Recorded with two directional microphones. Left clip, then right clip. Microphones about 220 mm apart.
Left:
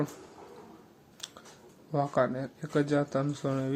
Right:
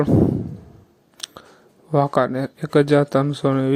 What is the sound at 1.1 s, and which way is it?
Scissors, 35° right (ahead or behind).